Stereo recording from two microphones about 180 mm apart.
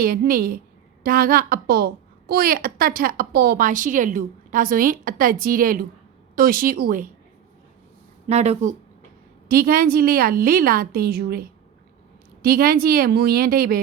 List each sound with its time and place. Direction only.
0.0 s a woman's voice: 55° right (ahead or behind)
8.3 s speech: 35° right (ahead or behind)
9.5 s a woman's voice: 55° right (ahead or behind)